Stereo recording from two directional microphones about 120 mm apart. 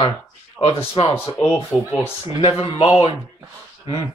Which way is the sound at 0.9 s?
45° left (ahead or behind).